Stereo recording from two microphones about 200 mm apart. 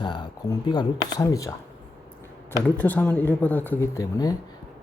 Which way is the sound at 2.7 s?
10° left (ahead or behind).